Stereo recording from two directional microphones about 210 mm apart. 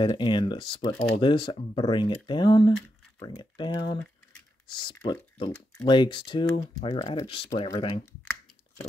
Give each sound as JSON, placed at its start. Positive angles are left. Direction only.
{"t": 0.0, "sound": "speech", "side_deg": 20}